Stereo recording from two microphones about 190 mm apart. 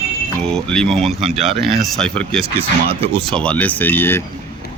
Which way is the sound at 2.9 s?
30° right (ahead or behind).